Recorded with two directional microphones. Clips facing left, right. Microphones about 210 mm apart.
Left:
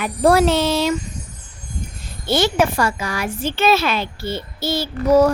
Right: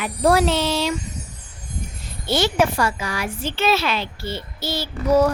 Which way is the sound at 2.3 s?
50° left (ahead or behind).